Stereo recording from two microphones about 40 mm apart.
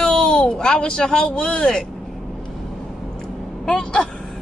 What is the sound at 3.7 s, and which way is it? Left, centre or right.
Speech, left.